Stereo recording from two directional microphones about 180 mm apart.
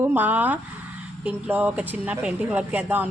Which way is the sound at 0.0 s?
10° right (ahead or behind).